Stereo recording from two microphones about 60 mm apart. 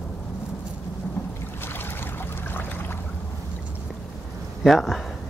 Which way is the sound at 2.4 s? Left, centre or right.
Left.